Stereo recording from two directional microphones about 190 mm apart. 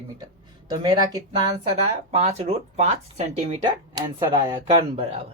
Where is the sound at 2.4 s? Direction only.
35° right (ahead or behind).